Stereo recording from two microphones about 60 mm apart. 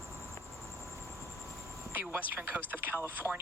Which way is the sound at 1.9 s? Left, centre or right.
Right.